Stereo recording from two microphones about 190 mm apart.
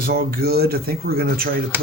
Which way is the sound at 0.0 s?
50° right (ahead or behind).